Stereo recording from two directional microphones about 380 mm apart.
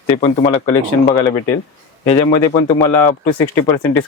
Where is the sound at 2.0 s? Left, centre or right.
Centre.